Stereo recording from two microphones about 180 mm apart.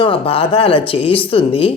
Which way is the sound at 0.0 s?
30° left (ahead or behind).